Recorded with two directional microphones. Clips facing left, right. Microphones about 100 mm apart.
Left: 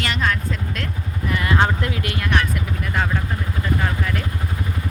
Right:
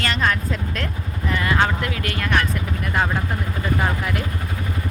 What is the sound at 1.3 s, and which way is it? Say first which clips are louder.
Vehicle: even; 20° left (ahead or behind).